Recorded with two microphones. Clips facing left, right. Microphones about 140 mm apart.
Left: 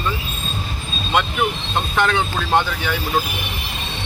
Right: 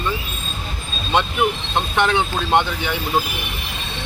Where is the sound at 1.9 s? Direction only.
20° right (ahead or behind).